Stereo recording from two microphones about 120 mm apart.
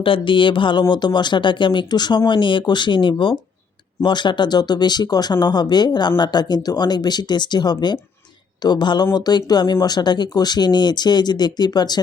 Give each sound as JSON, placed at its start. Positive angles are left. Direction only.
{"t": 0.0, "sound": "speech", "side_deg": 45}